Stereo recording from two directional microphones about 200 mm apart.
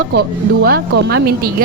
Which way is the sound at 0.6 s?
50° right (ahead or behind).